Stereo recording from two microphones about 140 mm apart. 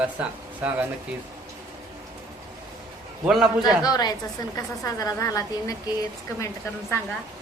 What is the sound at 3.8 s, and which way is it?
A woman's voice, 30° left (ahead or behind).